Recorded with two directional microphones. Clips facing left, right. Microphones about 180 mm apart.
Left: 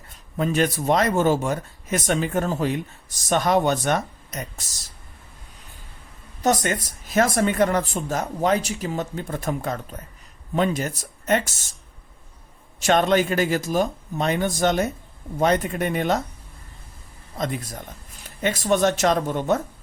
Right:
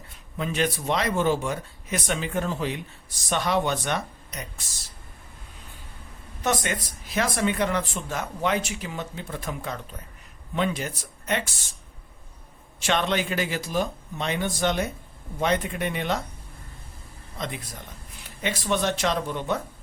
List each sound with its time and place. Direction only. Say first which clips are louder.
0.3 s speech: left 5 dB; 45° left (ahead or behind)
6.4 s speech: left 5 dB; 40° left (ahead or behind)
12.8 s speech: left 6 dB; 45° left (ahead or behind)
17.3 s speech: left 6 dB; 45° left (ahead or behind)